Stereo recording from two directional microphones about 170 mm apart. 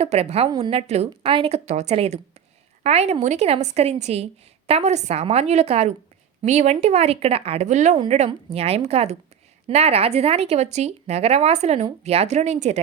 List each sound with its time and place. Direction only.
0.0 s speech: 40° right (ahead or behind)